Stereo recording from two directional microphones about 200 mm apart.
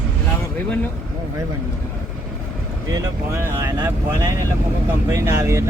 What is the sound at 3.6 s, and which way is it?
Speech, 15° right (ahead or behind).